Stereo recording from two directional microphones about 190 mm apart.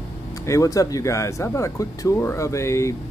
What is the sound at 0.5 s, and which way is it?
Speech, 15° left (ahead or behind).